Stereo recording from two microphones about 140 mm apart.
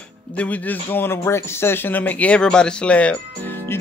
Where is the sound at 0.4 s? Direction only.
10° left (ahead or behind).